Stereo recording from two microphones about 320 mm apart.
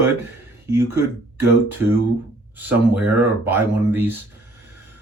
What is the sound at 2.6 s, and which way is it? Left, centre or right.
Speech, centre.